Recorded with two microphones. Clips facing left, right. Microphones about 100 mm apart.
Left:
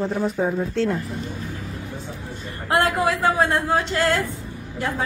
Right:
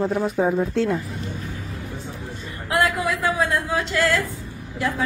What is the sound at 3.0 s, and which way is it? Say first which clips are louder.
Speech: left 3 dB; 30° left (ahead or behind).